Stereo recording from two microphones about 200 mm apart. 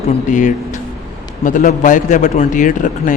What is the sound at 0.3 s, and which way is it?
A man's voice, 40° left (ahead or behind).